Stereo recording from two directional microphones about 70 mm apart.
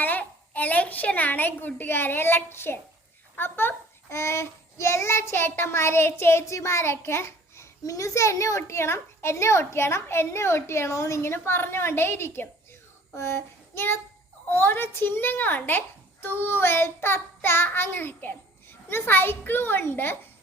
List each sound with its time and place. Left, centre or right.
0.0 s a woman's voice: left
13.1 s child singing: left
14.5 s a child's voice: left